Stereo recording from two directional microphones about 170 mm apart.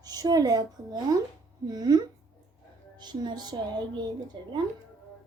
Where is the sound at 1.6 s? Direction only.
25° right (ahead or behind).